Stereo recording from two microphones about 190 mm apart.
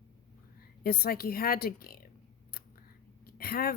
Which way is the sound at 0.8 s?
55° left (ahead or behind).